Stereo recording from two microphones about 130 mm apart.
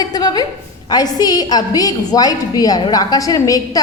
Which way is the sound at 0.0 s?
30° left (ahead or behind).